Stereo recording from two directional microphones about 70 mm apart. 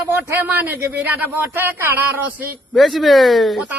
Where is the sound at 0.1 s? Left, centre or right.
Right.